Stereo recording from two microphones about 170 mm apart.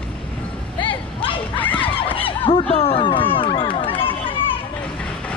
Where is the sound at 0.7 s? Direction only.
30° left (ahead or behind).